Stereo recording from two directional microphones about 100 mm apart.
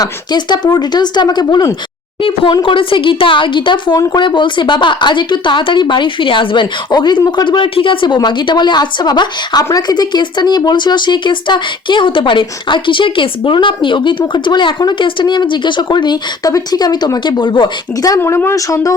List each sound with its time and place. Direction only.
0.0 s speech: 45° left (ahead or behind)
2.2 s speech: 55° left (ahead or behind)
18.2 s speech: 25° left (ahead or behind)